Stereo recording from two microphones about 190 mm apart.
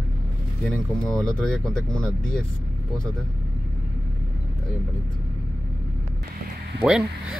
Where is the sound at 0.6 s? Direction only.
Centre (ahead or behind).